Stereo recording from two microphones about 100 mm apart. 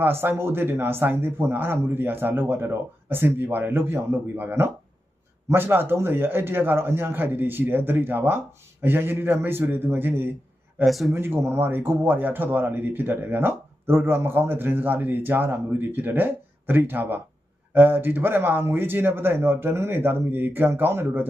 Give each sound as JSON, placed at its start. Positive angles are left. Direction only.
{"t": 0.0, "sound": "speech", "side_deg": -20}
{"t": 10.8, "sound": "speech", "side_deg": 0}
{"t": 11.1, "sound": "speech", "side_deg": -25}